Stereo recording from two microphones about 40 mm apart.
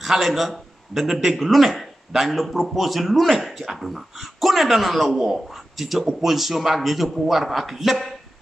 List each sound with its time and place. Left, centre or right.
0.0 s a man's voice: centre